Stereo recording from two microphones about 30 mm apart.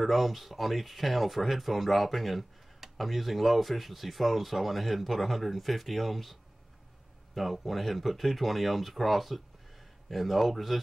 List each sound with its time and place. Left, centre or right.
0.0 s speech: centre
7.3 s speech: centre